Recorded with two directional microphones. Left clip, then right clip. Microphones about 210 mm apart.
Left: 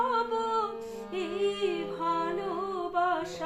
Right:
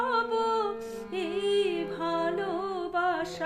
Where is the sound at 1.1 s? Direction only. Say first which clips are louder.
Right 3 dB; 50° right (ahead or behind).